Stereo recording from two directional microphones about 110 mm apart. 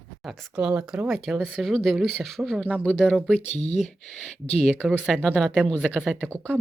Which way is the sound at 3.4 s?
75° left (ahead or behind).